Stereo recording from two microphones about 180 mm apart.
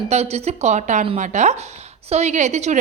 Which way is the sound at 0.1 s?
40° right (ahead or behind).